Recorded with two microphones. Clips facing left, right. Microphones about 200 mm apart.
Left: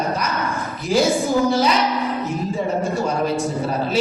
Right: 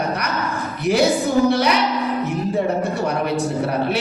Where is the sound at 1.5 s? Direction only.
65° right (ahead or behind).